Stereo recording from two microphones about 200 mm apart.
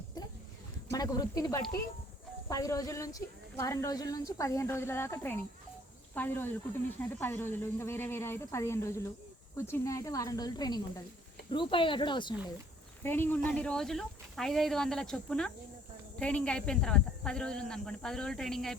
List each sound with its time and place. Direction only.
0.9 s a sound: 20° left (ahead or behind)
2.5 s speech: 15° left (ahead or behind)
13.0 s speech: 10° left (ahead or behind)